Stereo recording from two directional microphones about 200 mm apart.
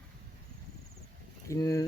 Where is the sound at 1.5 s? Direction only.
15° left (ahead or behind).